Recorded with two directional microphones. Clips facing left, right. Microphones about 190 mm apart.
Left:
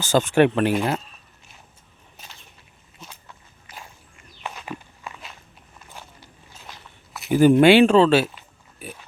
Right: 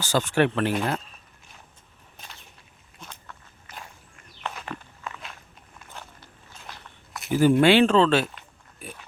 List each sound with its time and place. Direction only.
0.0 s speech: 20° left (ahead or behind)
0.7 s speech: 5° left (ahead or behind)
3.0 s walk: 5° left (ahead or behind)
4.4 s walk: 10° left (ahead or behind)
7.3 s speech: 15° left (ahead or behind)